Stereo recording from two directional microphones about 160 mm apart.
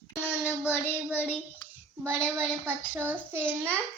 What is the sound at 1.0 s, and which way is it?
Speech, 5° right (ahead or behind).